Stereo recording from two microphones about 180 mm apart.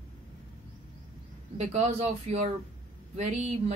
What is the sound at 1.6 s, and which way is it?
A woman's voice, 35° right (ahead or behind).